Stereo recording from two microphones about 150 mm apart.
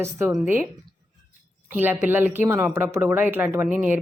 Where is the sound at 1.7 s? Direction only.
15° right (ahead or behind).